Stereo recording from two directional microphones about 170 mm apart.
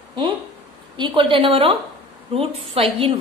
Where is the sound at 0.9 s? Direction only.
30° right (ahead or behind).